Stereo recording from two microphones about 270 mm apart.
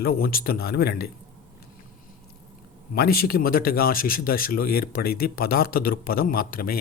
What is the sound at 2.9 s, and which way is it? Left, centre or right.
A man's voice, left.